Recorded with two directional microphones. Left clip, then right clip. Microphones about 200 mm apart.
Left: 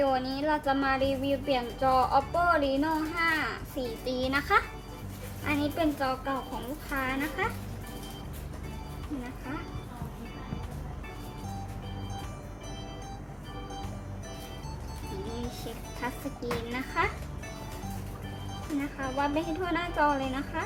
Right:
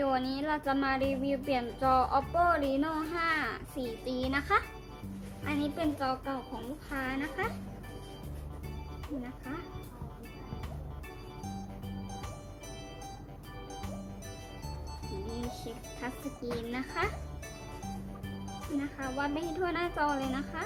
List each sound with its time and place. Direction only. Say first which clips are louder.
0.0 s speech: left 4 dB; 15° right (ahead or behind)
16.7 s a woman's voice: left 5 dB; 20° right (ahead or behind)
18.9 s a woman's voice: left 6 dB; 25° right (ahead or behind)